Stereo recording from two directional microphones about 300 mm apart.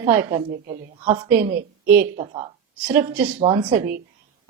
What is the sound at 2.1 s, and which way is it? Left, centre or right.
Speech, right.